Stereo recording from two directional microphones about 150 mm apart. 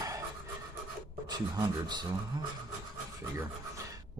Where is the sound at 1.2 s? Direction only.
25° right (ahead or behind).